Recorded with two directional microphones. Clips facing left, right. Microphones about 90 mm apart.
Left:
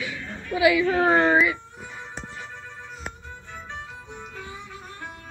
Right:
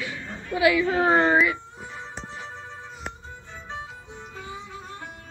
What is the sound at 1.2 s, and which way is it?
Speech, centre (ahead or behind).